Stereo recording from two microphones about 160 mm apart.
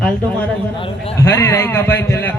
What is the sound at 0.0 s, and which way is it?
Speech, 10° left (ahead or behind).